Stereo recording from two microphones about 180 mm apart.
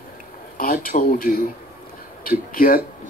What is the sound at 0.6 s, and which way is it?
A man's voice, 50° left (ahead or behind).